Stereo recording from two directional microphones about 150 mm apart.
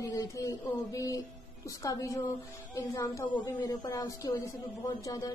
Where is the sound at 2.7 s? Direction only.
20° left (ahead or behind).